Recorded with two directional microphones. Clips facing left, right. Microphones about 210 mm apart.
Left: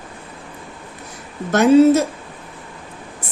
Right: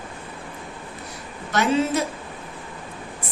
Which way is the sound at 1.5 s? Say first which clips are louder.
Left 10 dB; 45° left (ahead or behind).